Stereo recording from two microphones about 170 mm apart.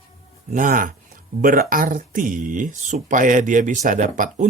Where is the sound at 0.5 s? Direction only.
50° right (ahead or behind).